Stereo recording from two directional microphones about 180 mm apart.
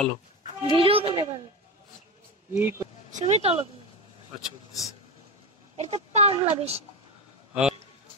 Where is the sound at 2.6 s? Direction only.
15° right (ahead or behind).